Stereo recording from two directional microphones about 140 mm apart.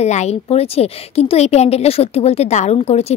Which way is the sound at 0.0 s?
55° left (ahead or behind).